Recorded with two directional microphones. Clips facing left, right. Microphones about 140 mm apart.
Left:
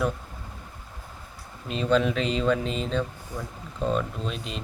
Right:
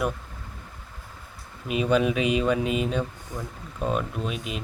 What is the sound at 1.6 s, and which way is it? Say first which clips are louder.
Speech: right 1 dB; 10° right (ahead or behind).